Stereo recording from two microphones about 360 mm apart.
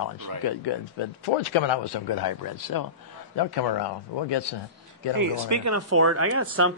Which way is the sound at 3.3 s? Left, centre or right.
Left.